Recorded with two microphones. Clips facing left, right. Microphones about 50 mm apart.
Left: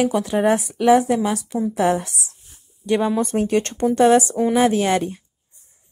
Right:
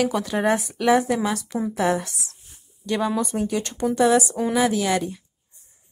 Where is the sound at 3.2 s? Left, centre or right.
Left.